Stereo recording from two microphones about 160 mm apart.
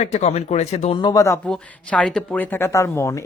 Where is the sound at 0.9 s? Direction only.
25° left (ahead or behind).